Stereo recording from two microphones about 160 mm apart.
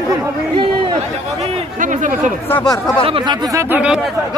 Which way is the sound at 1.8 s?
55° right (ahead or behind).